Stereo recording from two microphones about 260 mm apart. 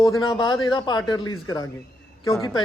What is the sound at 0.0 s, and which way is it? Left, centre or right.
A man's voice, centre.